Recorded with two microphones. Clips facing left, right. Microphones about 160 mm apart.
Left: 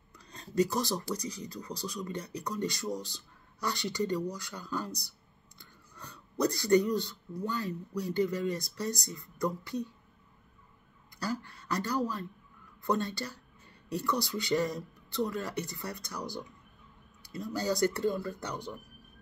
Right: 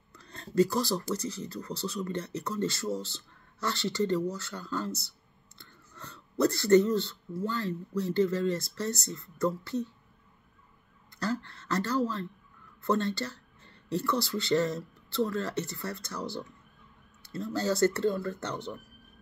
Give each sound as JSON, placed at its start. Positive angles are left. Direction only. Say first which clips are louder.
{"t": 0.1, "sound": "a sound", "louder": "right 3 dB", "side_deg": 15}
{"t": 1.1, "sound": "speech", "louder": "right 3 dB", "side_deg": 15}
{"t": 11.1, "sound": "speech", "louder": "right 3 dB", "side_deg": 10}